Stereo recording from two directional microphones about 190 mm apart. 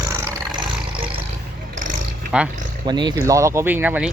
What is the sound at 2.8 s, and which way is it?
Speech, 25° right (ahead or behind).